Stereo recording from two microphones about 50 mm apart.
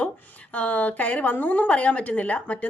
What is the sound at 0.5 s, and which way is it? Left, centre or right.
A woman's voice, left.